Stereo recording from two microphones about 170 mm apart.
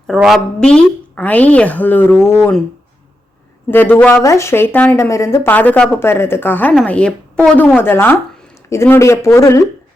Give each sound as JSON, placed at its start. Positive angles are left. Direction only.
{"t": 0.1, "sound": "speech", "side_deg": 0}
{"t": 3.7, "sound": "speech", "side_deg": 10}